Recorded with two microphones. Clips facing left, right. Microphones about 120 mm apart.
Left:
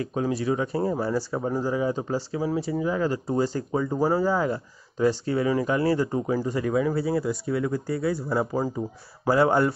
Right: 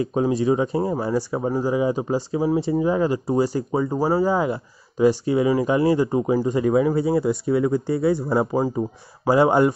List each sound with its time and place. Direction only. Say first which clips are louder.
0.0 s speech: right 6 dB; 20° right (ahead or behind)